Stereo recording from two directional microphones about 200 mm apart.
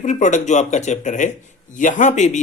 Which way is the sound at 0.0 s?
35° left (ahead or behind).